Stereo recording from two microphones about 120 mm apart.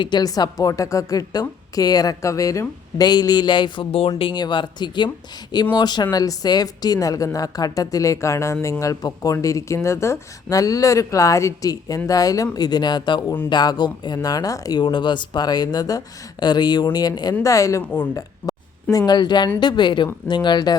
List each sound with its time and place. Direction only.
0.0 s a woman's voice: 35° left (ahead or behind)